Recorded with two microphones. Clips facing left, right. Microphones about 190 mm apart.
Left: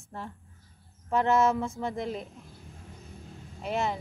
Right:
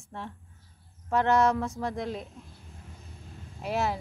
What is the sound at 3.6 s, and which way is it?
Speech, 5° right (ahead or behind).